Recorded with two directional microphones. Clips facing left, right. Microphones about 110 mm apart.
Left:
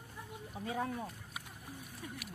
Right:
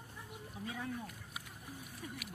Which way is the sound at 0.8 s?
50° left (ahead or behind).